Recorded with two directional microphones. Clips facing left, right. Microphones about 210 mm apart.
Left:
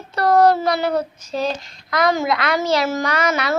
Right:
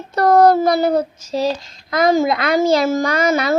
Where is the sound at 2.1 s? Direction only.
45° right (ahead or behind).